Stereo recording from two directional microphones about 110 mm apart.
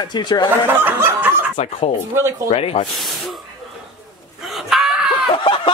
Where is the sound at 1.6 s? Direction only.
70° left (ahead or behind).